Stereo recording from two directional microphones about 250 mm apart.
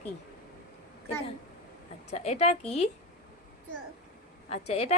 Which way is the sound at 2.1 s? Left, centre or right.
Left.